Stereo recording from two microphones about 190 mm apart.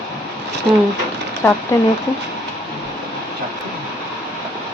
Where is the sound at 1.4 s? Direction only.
10° left (ahead or behind).